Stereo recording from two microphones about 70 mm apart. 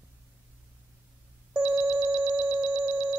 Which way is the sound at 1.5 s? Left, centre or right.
Centre.